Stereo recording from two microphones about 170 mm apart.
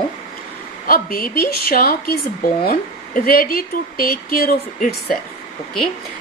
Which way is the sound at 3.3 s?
60° left (ahead or behind).